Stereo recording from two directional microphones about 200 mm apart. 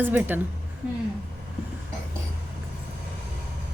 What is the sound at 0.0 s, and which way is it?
Speech, 10° right (ahead or behind).